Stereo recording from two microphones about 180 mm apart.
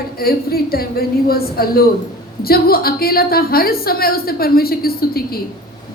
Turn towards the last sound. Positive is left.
turn(degrees=55)  # may be behind; listen again after turning